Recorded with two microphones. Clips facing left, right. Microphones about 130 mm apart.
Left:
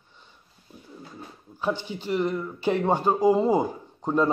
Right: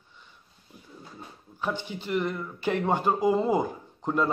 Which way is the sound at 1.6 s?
15° left (ahead or behind).